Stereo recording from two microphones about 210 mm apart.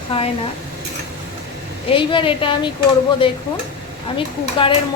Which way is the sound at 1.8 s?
25° left (ahead or behind).